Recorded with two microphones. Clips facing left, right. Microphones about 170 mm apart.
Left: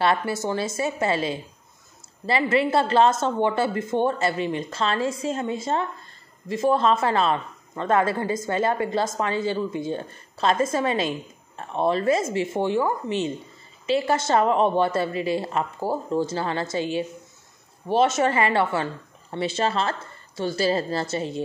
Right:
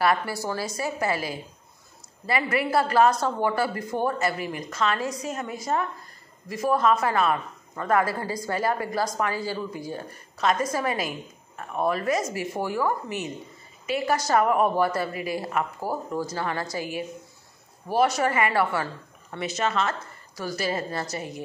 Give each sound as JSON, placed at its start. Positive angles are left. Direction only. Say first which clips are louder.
{"t": 0.0, "sound": "speech", "louder": "left 2 dB", "side_deg": 25}